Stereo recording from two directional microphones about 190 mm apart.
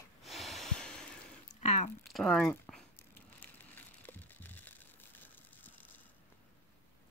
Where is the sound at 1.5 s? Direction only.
35° left (ahead or behind).